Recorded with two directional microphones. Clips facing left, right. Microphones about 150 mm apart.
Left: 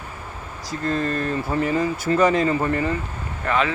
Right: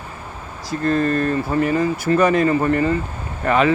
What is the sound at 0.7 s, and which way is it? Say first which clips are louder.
Speech: right 5 dB; 20° left (ahead or behind).